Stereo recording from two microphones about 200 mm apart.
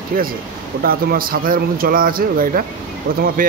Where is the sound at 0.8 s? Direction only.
45° right (ahead or behind).